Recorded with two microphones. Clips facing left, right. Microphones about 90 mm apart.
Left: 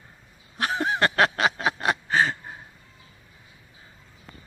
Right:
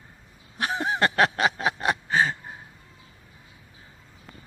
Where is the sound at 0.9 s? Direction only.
15° right (ahead or behind).